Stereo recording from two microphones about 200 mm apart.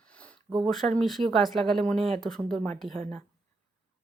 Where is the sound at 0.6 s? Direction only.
Centre (ahead or behind).